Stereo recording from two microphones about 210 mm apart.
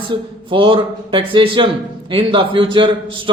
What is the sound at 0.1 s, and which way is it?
A man's voice, 20° right (ahead or behind).